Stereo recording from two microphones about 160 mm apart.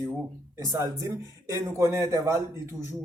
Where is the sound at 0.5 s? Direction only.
20° right (ahead or behind).